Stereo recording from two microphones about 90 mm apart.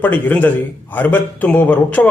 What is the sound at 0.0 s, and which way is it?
A man's voice, 20° left (ahead or behind).